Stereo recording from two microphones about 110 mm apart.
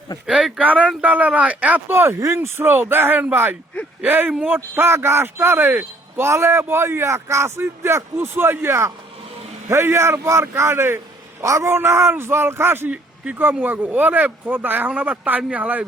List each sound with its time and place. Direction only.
0.3 s speech: 5° right (ahead or behind)